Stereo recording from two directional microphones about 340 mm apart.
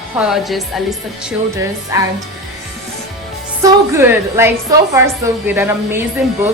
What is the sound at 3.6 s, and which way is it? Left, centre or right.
A woman's voice, centre.